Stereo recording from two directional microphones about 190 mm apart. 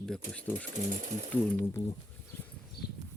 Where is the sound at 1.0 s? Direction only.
40° right (ahead or behind).